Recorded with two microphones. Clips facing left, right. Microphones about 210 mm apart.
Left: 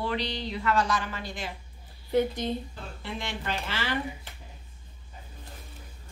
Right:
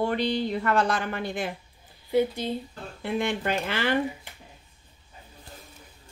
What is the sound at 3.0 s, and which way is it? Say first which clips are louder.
Speech: right 9 dB; 55° right (ahead or behind).